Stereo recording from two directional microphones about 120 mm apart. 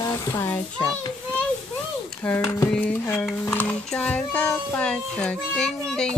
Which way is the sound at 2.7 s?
10° left (ahead or behind).